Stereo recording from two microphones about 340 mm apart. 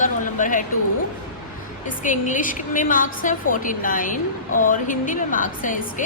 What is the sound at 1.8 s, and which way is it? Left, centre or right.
A woman's voice, left.